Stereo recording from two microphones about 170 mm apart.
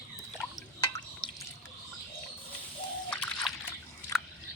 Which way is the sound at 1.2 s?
30° left (ahead or behind).